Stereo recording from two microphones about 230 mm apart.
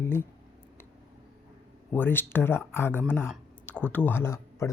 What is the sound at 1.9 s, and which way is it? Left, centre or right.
Speech, centre.